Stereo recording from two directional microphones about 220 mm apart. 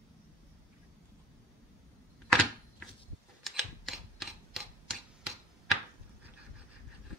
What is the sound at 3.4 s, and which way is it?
Typewriter, centre (ahead or behind).